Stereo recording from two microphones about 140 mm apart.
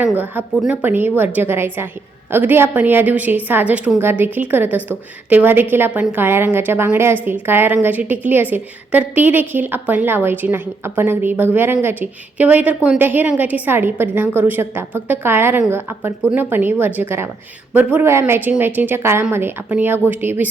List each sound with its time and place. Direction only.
0.0 s a woman's voice: 15° right (ahead or behind)